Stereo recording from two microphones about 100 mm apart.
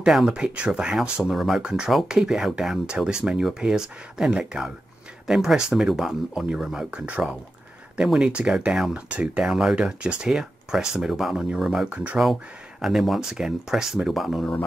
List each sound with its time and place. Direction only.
0.0 s speech: 5° right (ahead or behind)
12.8 s speech: centre (ahead or behind)